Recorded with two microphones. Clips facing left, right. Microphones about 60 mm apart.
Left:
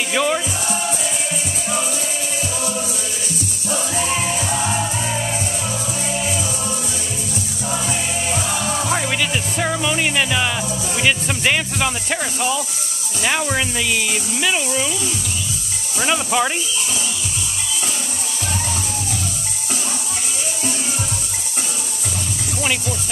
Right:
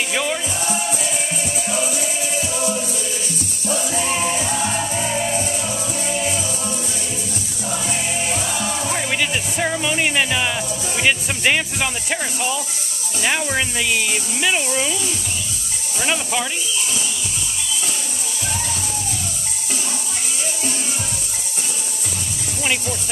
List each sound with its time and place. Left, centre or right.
0.1 s music: centre
1.7 s music: centre
6.3 s music: centre
9.1 s music: centre
11.0 s speech: centre
16.1 s speech: centre